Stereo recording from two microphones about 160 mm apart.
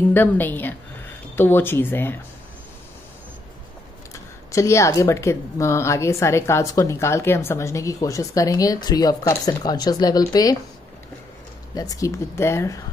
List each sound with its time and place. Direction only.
0.1 s speech: 10° left (ahead or behind)
4.1 s speech: 20° left (ahead or behind)
11.7 s speech: 20° left (ahead or behind)